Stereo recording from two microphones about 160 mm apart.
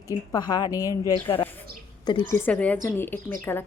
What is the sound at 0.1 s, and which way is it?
A woman's voice, 25° left (ahead or behind).